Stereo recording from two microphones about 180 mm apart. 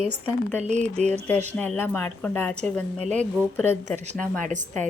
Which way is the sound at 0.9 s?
35° right (ahead or behind).